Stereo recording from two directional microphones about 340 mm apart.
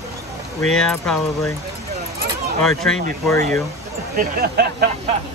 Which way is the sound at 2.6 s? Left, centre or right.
Centre.